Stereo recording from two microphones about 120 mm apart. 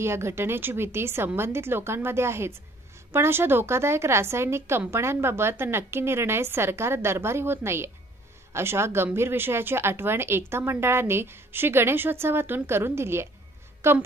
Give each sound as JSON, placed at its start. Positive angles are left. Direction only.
{"t": 0.0, "sound": "a woman's voice", "side_deg": -20}